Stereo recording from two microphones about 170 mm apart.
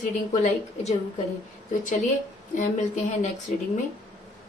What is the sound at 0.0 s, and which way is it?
Speech, 45° left (ahead or behind).